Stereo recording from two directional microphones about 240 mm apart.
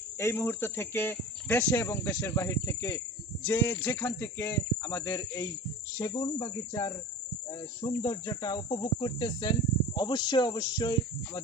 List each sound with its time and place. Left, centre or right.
0.2 s cricket: centre